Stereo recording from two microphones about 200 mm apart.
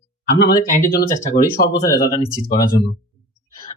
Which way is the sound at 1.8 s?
15° left (ahead or behind).